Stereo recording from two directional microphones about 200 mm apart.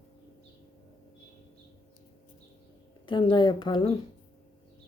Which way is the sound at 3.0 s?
25° left (ahead or behind).